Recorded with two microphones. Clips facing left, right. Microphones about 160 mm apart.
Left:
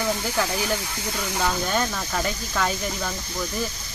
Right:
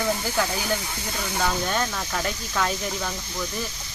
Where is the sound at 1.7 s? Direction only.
Centre (ahead or behind).